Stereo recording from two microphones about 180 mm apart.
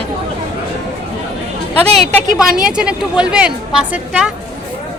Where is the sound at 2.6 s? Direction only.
5° right (ahead or behind).